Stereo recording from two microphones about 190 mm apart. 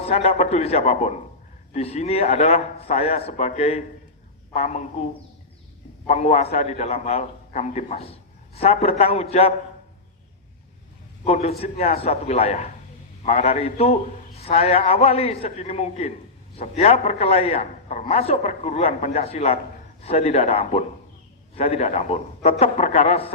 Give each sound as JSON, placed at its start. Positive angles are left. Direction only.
{"t": 0.0, "sound": "a man's voice", "side_deg": 35}
{"t": 6.1, "sound": "a man's voice", "side_deg": 35}
{"t": 11.3, "sound": "a man's voice", "side_deg": 35}